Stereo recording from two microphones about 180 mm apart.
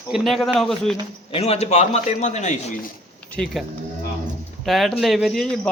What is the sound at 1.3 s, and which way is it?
A man's voice, 35° left (ahead or behind).